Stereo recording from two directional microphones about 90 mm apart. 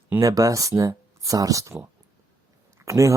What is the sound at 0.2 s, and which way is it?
Speech, 40° right (ahead or behind).